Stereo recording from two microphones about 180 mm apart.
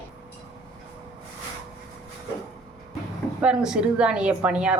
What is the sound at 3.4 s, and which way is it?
A woman's voice, 5° right (ahead or behind).